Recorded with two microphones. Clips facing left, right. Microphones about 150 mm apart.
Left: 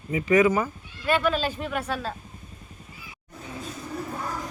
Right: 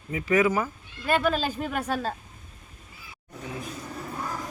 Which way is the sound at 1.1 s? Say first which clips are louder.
Left 1 dB; 40° right (ahead or behind).